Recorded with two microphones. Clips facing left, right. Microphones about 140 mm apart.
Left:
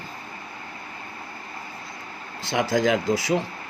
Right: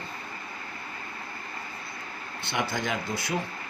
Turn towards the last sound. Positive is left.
turn(degrees=90)